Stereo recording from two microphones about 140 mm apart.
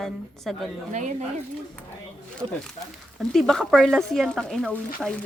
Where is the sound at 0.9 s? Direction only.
60° right (ahead or behind).